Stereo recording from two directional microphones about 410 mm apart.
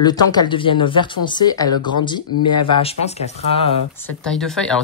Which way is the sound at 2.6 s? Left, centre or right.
Centre.